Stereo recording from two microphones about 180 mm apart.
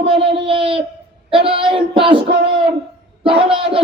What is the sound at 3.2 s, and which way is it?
Speech, 30° right (ahead or behind).